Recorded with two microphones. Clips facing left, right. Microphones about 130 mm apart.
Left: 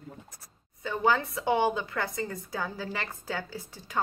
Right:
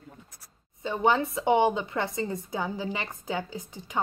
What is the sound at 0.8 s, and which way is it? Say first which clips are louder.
A woman's voice: right 2 dB; 25° right (ahead or behind).